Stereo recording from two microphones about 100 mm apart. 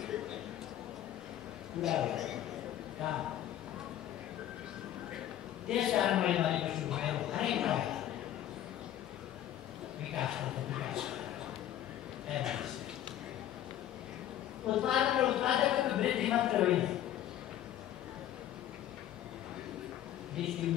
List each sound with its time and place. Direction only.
1.8 s a woman's voice: 5° right (ahead or behind)
5.7 s a woman's voice: 5° right (ahead or behind)
10.1 s speech: 5° right (ahead or behind)
12.3 s a woman's voice: 5° right (ahead or behind)
14.7 s a woman's voice: 5° right (ahead or behind)
20.4 s a sound: 5° right (ahead or behind)